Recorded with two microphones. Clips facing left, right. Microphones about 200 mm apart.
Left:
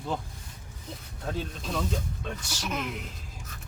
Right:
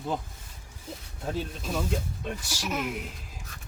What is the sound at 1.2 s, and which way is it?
Speech, 5° right (ahead or behind).